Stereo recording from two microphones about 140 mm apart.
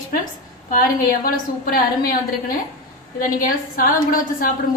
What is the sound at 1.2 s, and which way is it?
Speech, 90° left.